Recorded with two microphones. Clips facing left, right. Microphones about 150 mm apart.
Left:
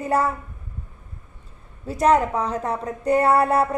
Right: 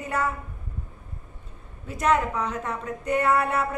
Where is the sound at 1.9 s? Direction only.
35° left (ahead or behind).